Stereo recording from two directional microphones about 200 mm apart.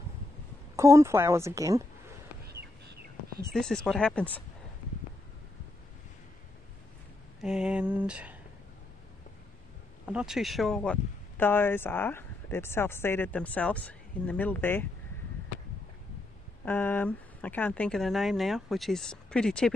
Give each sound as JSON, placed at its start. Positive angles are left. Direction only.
{"t": 0.7, "sound": "speech", "side_deg": -15}
{"t": 2.4, "sound": "bird", "side_deg": -55}
{"t": 3.5, "sound": "speech", "side_deg": 5}
{"t": 7.4, "sound": "speech", "side_deg": -5}
{"t": 10.0, "sound": "speech", "side_deg": -5}
{"t": 16.6, "sound": "speech", "side_deg": 10}